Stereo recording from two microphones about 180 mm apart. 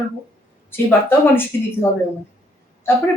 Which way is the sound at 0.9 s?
10° left (ahead or behind).